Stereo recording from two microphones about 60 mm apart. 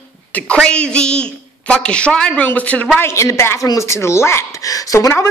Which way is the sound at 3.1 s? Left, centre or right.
Left.